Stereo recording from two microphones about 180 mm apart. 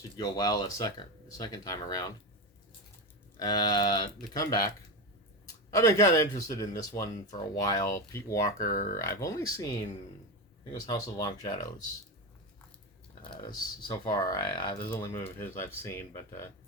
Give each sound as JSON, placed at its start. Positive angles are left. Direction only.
{"t": 0.2, "sound": "speech", "side_deg": 20}
{"t": 3.3, "sound": "speech", "side_deg": 20}
{"t": 8.7, "sound": "speech", "side_deg": 45}
{"t": 9.0, "sound": "speech", "side_deg": 15}
{"t": 10.7, "sound": "speech", "side_deg": 20}
{"t": 13.2, "sound": "speech", "side_deg": 25}